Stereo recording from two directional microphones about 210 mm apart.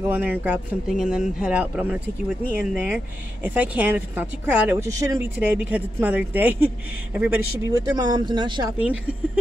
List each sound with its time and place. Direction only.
0.1 s speech: 10° right (ahead or behind)
8.7 s speech: 5° right (ahead or behind)